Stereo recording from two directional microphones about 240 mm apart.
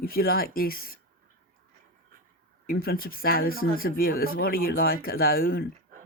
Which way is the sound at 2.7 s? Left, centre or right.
Left.